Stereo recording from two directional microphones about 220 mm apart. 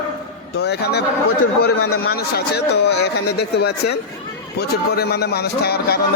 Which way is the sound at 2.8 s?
50° left (ahead or behind).